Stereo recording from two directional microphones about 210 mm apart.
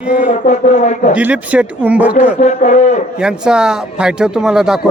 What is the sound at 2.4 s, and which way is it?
Speech, 35° left (ahead or behind).